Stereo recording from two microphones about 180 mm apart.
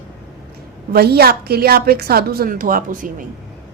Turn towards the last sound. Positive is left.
turn(degrees=-50)  # may be behind; listen again after turning